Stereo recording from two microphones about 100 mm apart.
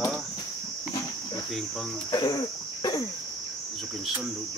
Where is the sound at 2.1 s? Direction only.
45° left (ahead or behind).